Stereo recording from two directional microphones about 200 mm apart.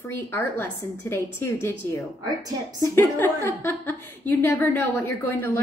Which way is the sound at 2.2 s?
20° right (ahead or behind).